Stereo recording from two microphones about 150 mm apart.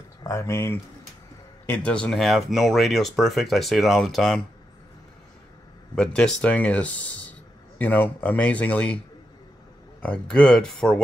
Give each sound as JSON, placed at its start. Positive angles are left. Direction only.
{"t": 0.2, "sound": "speech", "side_deg": 20}
{"t": 5.9, "sound": "speech", "side_deg": 5}
{"t": 10.0, "sound": "speech", "side_deg": 5}